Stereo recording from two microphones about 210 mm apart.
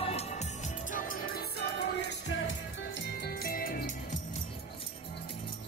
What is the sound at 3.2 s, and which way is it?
Music, 45° left (ahead or behind).